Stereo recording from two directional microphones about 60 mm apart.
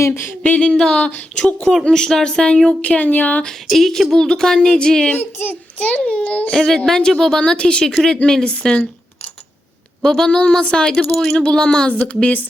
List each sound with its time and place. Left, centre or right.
0.0 s a sound: left
0.6 s a child's voice: centre
2.8 s a child's voice: left
3.4 s a sound: centre
4.1 s speech: centre
5.1 s a child's voice: left
5.9 s a child's voice: left
6.7 s speech: centre
10.0 s a child's voice: centre; by 12.5 s left